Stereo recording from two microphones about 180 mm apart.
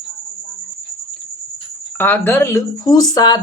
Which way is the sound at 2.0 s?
10° left (ahead or behind).